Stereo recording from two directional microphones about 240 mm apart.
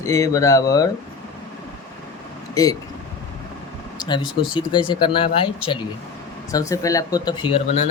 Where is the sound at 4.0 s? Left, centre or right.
Centre.